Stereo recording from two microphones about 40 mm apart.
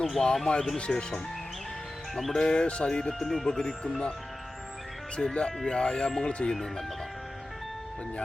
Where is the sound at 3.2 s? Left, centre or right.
Centre.